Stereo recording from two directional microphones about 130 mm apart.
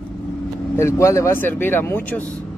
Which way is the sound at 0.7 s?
20° left (ahead or behind).